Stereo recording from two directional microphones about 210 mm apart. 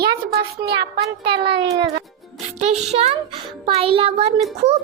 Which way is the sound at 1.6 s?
20° right (ahead or behind).